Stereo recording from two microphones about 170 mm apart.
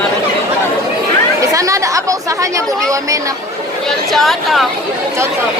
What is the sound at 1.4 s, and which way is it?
Chatter, 20° right (ahead or behind).